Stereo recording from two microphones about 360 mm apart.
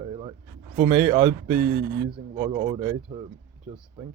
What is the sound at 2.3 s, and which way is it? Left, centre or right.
Speech, centre.